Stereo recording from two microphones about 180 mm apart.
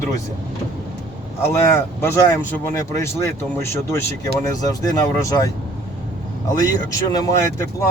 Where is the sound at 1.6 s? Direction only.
15° left (ahead or behind).